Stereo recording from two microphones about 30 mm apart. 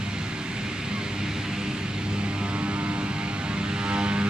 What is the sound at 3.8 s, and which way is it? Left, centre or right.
Vehicle, right.